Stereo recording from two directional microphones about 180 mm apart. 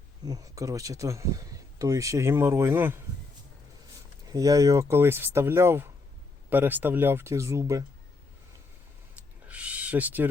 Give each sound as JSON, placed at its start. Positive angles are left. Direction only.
{"t": 0.3, "sound": "speech", "side_deg": -20}
{"t": 4.3, "sound": "speech", "side_deg": -20}
{"t": 9.1, "sound": "owl", "side_deg": -10}